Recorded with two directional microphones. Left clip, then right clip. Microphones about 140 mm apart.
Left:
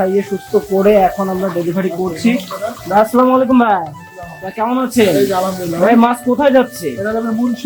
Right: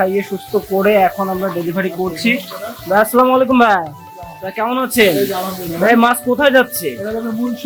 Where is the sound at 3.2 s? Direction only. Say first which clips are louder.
Even; 5° right (ahead or behind).